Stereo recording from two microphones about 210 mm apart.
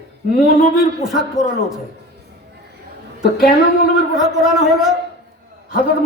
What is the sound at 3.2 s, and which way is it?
Speech, 45° left (ahead or behind).